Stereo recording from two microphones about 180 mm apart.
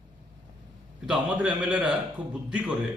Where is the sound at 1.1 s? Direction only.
5° right (ahead or behind).